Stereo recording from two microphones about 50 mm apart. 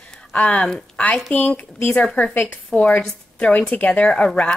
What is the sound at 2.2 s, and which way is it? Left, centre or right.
A woman's voice, left.